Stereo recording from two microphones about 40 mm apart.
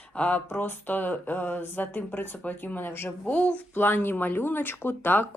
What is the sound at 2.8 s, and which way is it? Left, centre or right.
Speech, left.